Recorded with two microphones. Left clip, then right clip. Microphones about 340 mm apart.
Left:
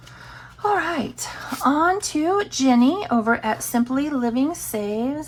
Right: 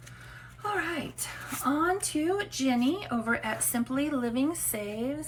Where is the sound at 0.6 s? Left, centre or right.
Centre.